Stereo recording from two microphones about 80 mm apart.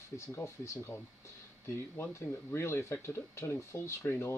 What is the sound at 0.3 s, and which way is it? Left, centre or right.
Speech, left.